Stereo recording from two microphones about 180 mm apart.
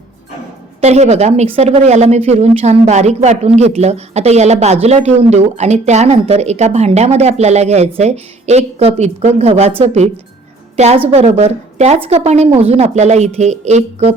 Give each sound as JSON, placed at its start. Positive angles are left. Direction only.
{"t": 0.8, "sound": "a woman's voice", "side_deg": -40}